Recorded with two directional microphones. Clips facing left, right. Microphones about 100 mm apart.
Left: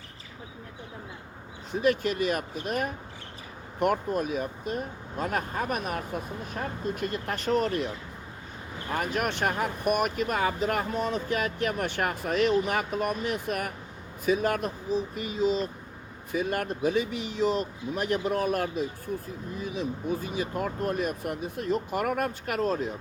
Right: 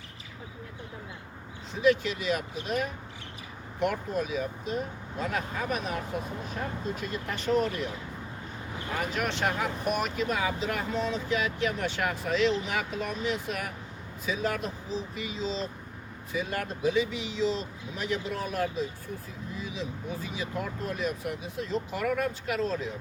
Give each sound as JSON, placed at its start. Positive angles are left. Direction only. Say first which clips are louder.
{"t": 1.7, "sound": "speech", "louder": "even", "side_deg": 50}
{"t": 8.9, "sound": "speech", "louder": "left 2 dB", "side_deg": 45}